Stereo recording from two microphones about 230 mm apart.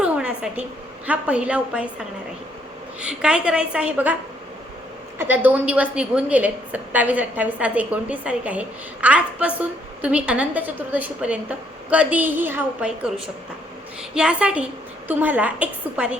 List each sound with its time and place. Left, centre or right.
0.0 s a sound: centre
1.0 s a woman's voice: centre
3.0 s a woman's voice: centre
5.1 s a woman's voice: centre